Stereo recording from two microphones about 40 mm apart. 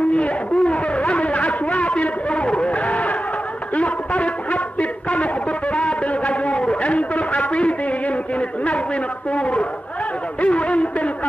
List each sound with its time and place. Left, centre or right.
0.1 s a sound: left
3.7 s music: left
8.4 s speech: left